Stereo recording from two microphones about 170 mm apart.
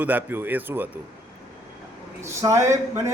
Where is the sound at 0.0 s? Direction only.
10° right (ahead or behind).